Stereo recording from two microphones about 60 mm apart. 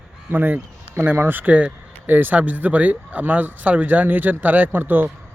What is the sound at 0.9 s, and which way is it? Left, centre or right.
Speech, right.